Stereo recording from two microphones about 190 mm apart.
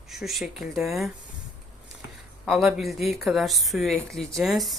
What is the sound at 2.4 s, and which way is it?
Speech, centre (ahead or behind).